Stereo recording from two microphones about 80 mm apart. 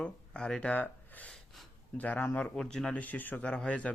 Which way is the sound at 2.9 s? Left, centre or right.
Centre.